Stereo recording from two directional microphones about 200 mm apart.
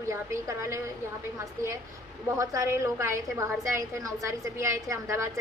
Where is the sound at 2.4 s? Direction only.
15° right (ahead or behind).